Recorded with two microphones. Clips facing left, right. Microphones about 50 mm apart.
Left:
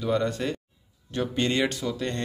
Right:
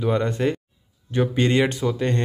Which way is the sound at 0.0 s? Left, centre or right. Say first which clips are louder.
Right 4 dB; right.